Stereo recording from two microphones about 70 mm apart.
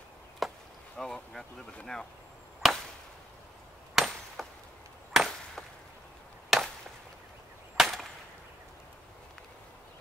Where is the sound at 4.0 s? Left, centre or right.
Centre.